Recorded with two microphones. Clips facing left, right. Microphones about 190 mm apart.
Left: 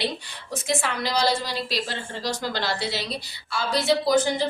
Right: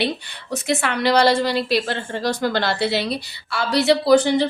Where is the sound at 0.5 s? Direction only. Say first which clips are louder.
Right 5 dB; 65° right (ahead or behind).